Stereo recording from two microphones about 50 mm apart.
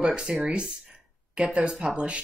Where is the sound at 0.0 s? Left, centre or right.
Centre.